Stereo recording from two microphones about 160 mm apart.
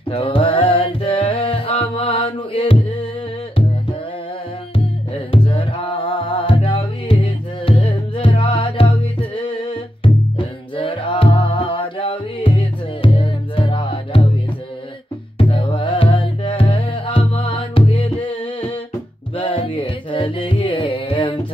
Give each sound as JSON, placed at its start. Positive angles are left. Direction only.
{"t": 0.1, "sound": "music", "side_deg": 35}
{"t": 5.3, "sound": "music", "side_deg": 35}
{"t": 10.0, "sound": "music", "side_deg": 30}
{"t": 15.3, "sound": "music", "side_deg": 35}